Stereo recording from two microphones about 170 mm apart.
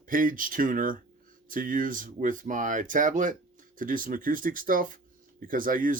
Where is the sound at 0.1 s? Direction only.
55° right (ahead or behind).